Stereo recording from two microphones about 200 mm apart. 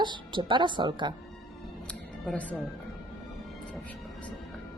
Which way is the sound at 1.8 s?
5° left (ahead or behind).